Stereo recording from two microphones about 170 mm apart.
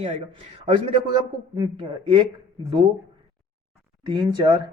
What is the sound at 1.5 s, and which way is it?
Speech, 25° right (ahead or behind).